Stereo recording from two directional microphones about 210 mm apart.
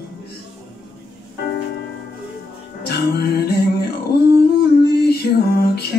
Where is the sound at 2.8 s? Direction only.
50° left (ahead or behind).